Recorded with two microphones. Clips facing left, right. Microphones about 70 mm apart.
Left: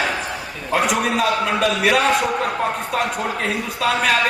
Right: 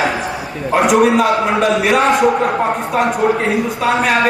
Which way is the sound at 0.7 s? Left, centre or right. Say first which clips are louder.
Right 8 dB; right.